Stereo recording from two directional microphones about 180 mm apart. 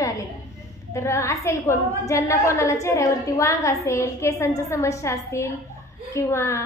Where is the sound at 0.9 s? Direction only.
15° left (ahead or behind).